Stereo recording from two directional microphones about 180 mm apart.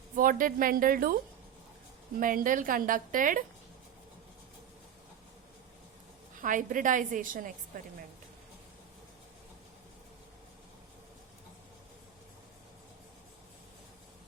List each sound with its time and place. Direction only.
0.2 s a woman's voice: 50° right (ahead or behind)
2.1 s a woman's voice: 50° right (ahead or behind)
6.4 s a woman's voice: 45° right (ahead or behind)